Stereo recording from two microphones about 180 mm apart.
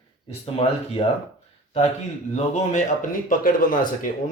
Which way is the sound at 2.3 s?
40° left (ahead or behind).